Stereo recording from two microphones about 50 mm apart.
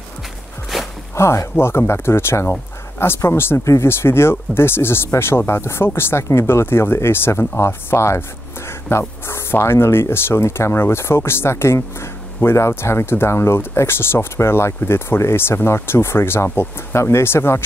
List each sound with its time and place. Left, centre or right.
0.7 s walk: centre
1.1 s speech: left
8.8 s speech: left
12.5 s speech: left